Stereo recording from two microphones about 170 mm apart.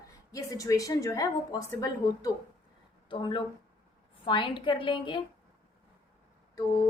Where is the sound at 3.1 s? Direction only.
30° left (ahead or behind).